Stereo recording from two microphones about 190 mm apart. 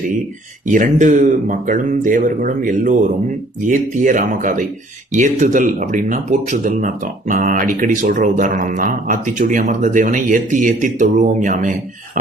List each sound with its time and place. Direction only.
0.7 s speech: 40° right (ahead or behind)